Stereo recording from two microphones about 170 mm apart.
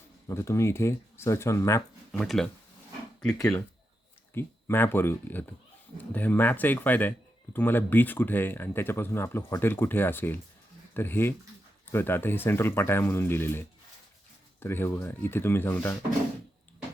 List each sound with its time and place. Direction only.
0.3 s speech: 15° left (ahead or behind)
2.1 s speech: centre (ahead or behind)
4.4 s speech: 10° left (ahead or behind)